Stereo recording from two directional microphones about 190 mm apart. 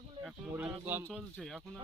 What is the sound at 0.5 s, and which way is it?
Speech, 10° right (ahead or behind).